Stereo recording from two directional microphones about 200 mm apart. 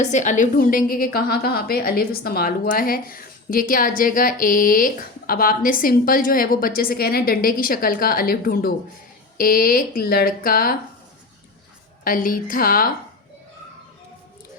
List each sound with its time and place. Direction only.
0.0 s a woman's voice: 35° left (ahead or behind)
12.0 s a woman's voice: 45° left (ahead or behind)